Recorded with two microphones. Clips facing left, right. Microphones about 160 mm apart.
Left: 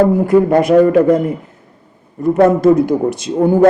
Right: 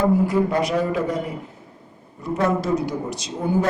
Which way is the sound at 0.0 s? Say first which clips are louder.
Left 8 dB; 55° left (ahead or behind).